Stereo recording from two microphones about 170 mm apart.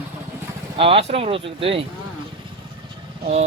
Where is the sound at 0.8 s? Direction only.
35° right (ahead or behind).